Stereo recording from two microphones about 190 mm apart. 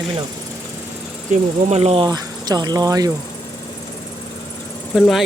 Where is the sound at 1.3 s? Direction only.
35° right (ahead or behind).